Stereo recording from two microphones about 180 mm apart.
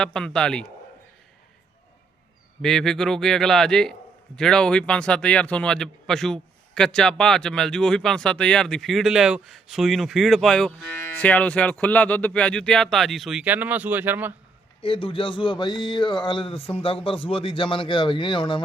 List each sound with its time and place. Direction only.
0.0 s speech: 5° left (ahead or behind)
2.6 s speech: centre (ahead or behind)
14.8 s speech: 30° left (ahead or behind)